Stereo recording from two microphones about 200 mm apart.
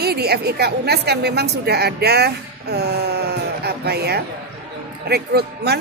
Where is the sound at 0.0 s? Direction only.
50° right (ahead or behind).